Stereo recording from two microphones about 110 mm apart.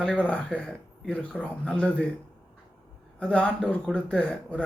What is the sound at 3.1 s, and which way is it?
Speech, 10° left (ahead or behind).